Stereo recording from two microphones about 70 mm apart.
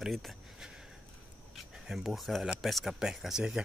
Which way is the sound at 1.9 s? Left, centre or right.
Centre.